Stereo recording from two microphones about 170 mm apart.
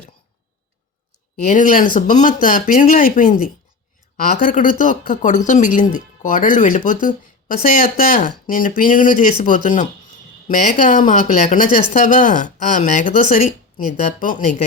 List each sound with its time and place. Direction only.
1.5 s speech: 50° left (ahead or behind)